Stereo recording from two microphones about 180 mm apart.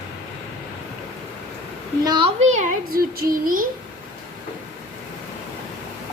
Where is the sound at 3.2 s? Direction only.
50° right (ahead or behind).